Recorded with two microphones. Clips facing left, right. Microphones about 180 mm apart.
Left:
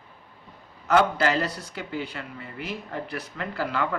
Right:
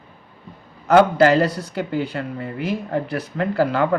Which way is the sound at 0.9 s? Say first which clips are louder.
Right 8 dB; 40° right (ahead or behind).